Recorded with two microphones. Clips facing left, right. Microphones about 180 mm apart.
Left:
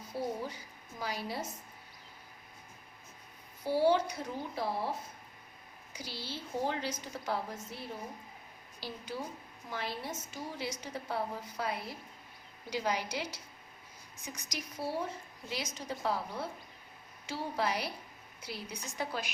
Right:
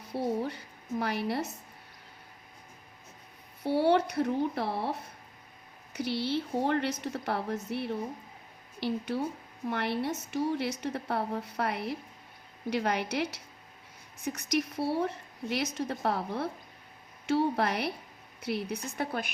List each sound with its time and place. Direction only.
0.1 s a woman's voice: 65° right (ahead or behind)
3.6 s a woman's voice: 65° right (ahead or behind)